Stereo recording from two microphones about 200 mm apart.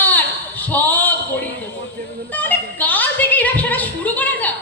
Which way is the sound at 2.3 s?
10° left (ahead or behind).